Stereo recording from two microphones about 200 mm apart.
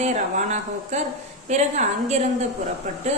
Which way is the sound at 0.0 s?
35° right (ahead or behind).